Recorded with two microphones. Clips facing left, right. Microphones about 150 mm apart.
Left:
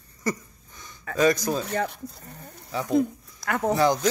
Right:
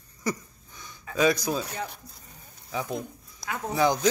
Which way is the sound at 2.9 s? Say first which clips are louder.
Left 13 dB; 65° left (ahead or behind).